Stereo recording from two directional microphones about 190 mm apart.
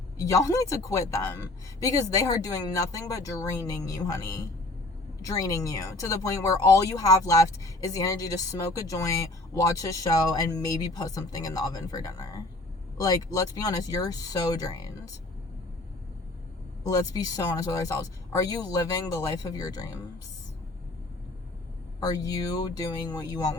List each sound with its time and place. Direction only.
0.2 s speech: 15° left (ahead or behind)
16.8 s speech: 20° left (ahead or behind)
22.0 s speech: 20° left (ahead or behind)